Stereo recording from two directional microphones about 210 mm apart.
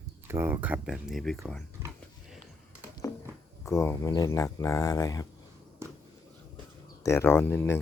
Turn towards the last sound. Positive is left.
turn(degrees=10)  # may be behind; listen again after turning